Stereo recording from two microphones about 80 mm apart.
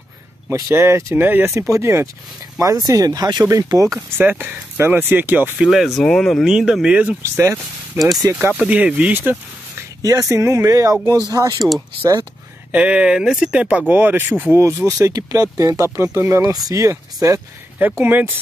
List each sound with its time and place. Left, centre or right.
0.5 s speech: right
2.6 s speech: right
3.4 s speech: right
4.2 s speech: right
5.6 s speech: centre
6.4 s speech: centre
7.2 s speech: right
8.3 s speech: right
8.6 s speech: centre
10.0 s speech: right
12.7 s speech: centre; by 14.7 s right
15.0 s speech: right
18.0 s speech: right